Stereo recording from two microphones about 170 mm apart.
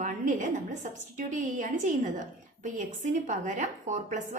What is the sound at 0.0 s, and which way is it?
A woman's voice, 45° right (ahead or behind).